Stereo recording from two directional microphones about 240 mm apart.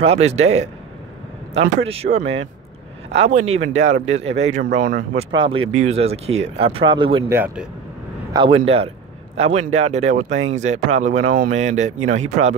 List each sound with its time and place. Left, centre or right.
0.0 s speech: right
1.9 s speech: right
5.3 s speech: right
7.3 s speech: centre
8.3 s speech: right